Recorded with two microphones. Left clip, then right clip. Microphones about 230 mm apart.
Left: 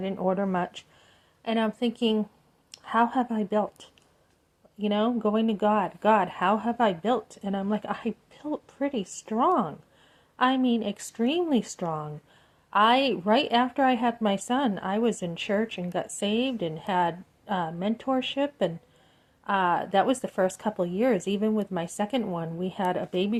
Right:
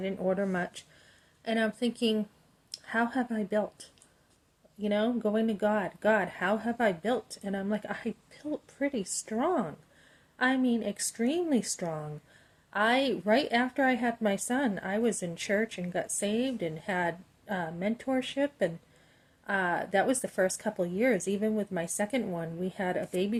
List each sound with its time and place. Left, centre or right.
0.0 s a woman's voice: centre